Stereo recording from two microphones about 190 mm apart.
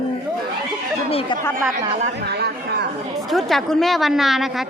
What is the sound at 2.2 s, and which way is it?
Speech, 60° right (ahead or behind).